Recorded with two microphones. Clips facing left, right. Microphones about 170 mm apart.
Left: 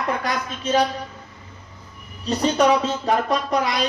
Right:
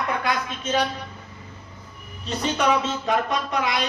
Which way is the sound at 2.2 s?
35° left (ahead or behind).